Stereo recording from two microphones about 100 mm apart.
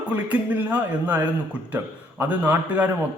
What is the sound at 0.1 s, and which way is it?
A man's voice, 15° right (ahead or behind).